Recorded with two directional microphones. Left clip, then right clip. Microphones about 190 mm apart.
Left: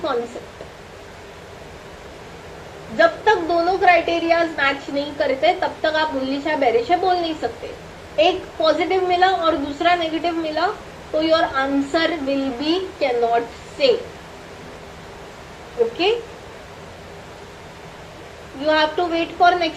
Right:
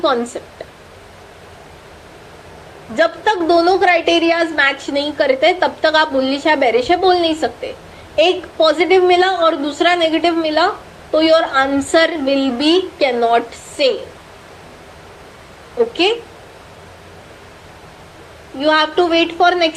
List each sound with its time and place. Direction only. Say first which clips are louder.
3.0 s a woman's voice: right 1 dB; 45° right (ahead or behind)
18.6 s a woman's voice: right 4 dB; 45° right (ahead or behind)